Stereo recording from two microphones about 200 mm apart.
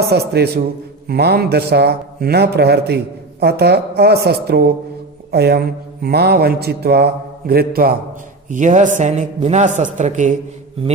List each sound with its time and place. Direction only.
0.1 s a man's voice: 55° right (ahead or behind); by 10.3 s 40° right (ahead or behind)